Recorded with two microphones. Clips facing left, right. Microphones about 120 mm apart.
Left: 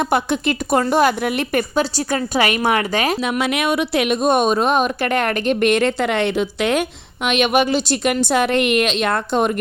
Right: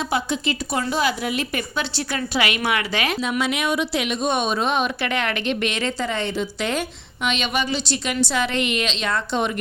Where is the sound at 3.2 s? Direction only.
60° left (ahead or behind).